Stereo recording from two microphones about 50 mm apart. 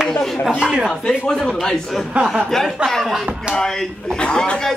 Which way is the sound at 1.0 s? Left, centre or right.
Centre.